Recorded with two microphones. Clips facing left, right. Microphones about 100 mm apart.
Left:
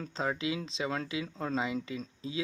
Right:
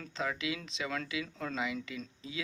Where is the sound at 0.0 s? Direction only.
30° left (ahead or behind).